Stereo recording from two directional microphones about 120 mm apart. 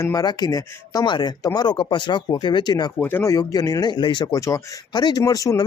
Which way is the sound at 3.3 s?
30° left (ahead or behind).